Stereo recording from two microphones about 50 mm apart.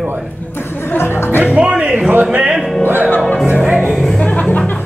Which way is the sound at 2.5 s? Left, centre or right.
Centre.